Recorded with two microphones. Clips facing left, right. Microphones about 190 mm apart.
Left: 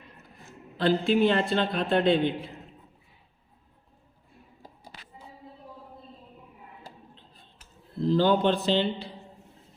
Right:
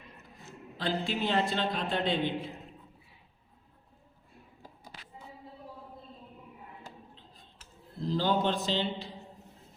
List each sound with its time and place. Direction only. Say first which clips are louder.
0.8 s a man's voice: left 10 dB; 60° left (ahead or behind)
8.0 s a man's voice: left 6 dB; 60° left (ahead or behind)